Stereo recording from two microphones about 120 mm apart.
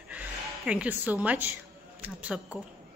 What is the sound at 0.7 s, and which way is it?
A woman's voice, 10° right (ahead or behind).